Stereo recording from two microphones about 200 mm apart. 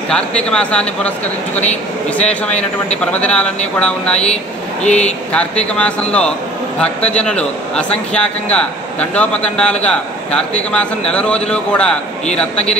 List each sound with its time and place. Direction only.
0.1 s speech: 5° left (ahead or behind)
4.8 s speech: 35° left (ahead or behind)
5.3 s speech: 5° left (ahead or behind)